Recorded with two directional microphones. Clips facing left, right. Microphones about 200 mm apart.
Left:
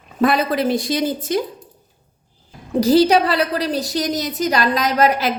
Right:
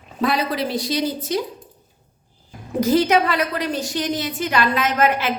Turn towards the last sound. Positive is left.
turn(degrees=40)  # may be behind; listen again after turning